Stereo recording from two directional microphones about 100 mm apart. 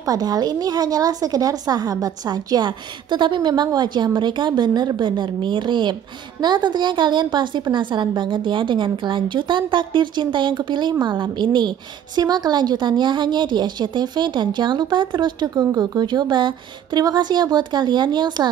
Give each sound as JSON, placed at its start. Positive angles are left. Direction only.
{"t": 0.0, "sound": "a woman's voice", "side_deg": -40}